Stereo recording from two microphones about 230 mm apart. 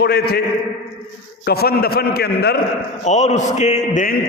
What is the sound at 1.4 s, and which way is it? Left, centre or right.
A man's voice, left.